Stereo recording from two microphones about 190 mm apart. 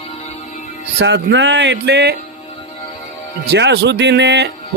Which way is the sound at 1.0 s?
65° right (ahead or behind).